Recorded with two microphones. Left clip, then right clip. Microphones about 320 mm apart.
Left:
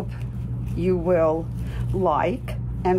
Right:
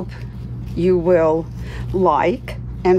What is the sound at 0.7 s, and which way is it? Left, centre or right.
Speech, right.